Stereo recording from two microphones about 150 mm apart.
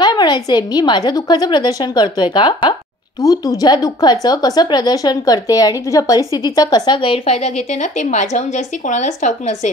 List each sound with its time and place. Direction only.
0.0 s speech: 30° left (ahead or behind); by 9.7 s 50° left (ahead or behind)